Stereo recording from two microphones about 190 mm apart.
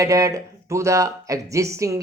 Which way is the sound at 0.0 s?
15° right (ahead or behind).